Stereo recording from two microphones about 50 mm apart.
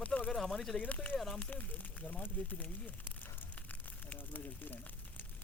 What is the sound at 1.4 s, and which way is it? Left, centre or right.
Speech, left.